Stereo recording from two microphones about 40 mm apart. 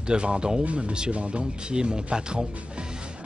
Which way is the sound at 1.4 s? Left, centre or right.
Right.